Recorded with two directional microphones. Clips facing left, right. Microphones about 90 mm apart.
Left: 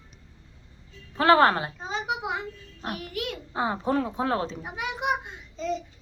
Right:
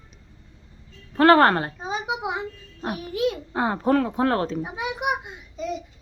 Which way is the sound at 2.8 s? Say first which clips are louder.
Right 8 dB; 20° right (ahead or behind).